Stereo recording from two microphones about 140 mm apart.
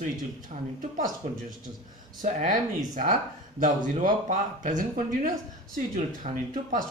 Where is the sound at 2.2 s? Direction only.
60° right (ahead or behind).